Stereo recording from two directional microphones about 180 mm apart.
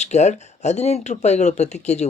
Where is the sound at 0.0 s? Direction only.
40° left (ahead or behind).